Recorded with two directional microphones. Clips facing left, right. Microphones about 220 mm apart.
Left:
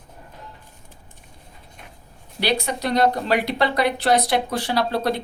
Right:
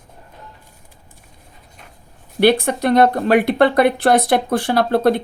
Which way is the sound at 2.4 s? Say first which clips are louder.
Right 9 dB; 55° right (ahead or behind).